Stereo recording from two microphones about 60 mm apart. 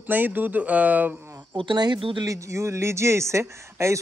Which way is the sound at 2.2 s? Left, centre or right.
Right.